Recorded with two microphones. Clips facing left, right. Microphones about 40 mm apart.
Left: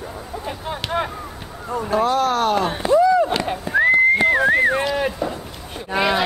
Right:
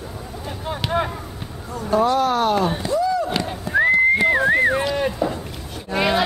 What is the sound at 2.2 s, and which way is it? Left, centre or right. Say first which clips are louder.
Speech: even; centre.